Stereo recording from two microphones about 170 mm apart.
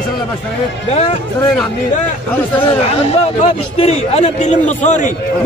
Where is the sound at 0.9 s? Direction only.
40° left (ahead or behind).